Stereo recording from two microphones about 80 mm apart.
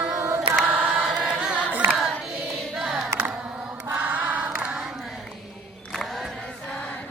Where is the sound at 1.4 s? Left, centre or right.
Centre.